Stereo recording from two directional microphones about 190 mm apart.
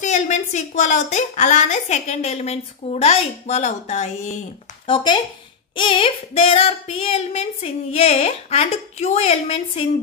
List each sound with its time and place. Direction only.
0.0 s a woman's voice: 40° left (ahead or behind)
4.8 s a woman's voice: 25° left (ahead or behind)